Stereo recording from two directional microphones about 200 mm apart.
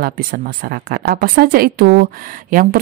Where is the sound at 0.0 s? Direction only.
50° right (ahead or behind).